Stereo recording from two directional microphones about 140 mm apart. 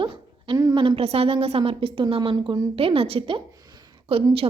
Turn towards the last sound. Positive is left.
turn(degrees=-45)  # may be behind; listen again after turning